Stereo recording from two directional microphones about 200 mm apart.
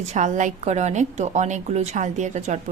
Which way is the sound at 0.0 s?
35° right (ahead or behind).